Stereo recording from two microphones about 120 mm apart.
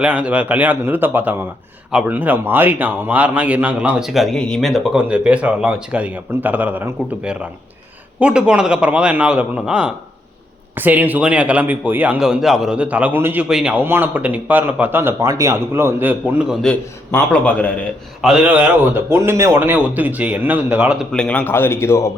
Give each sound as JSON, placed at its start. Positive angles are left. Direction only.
{"t": 0.0, "sound": "a man's voice", "side_deg": -10}
{"t": 16.6, "sound": "a man's voice", "side_deg": 10}
{"t": 18.2, "sound": "a man's voice", "side_deg": -5}
{"t": 21.1, "sound": "a man's voice", "side_deg": 10}